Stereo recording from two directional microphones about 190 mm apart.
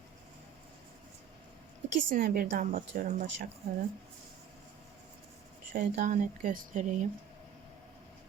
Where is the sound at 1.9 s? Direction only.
45° right (ahead or behind).